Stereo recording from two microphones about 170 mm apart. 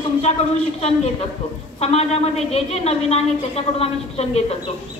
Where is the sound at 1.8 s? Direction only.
40° left (ahead or behind).